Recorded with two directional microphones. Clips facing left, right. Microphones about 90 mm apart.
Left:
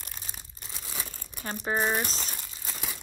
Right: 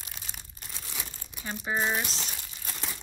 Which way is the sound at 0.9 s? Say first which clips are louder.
Left 3 dB; 45° left (ahead or behind).